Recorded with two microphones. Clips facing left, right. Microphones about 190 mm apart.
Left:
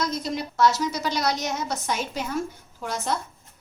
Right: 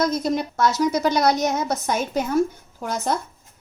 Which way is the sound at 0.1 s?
50° right (ahead or behind).